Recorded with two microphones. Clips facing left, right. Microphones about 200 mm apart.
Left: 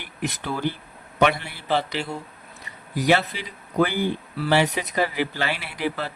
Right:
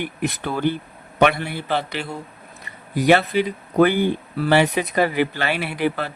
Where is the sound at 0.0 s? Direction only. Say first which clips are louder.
Right 5 dB; 55° right (ahead or behind).